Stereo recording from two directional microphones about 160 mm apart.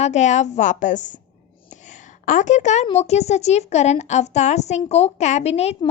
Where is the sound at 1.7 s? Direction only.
50° left (ahead or behind).